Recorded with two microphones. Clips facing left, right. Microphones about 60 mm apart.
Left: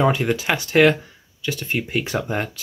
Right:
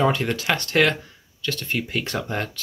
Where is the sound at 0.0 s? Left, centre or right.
Centre.